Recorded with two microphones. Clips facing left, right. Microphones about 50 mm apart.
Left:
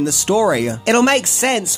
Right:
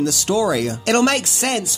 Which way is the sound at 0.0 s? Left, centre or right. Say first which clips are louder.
Left 3 dB; left.